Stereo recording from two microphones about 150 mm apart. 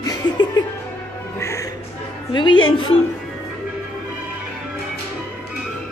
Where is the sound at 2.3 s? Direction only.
30° left (ahead or behind).